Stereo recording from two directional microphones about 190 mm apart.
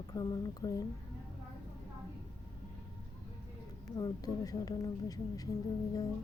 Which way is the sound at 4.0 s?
20° left (ahead or behind).